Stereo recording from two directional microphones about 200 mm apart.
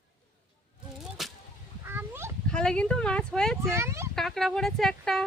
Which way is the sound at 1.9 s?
10° right (ahead or behind).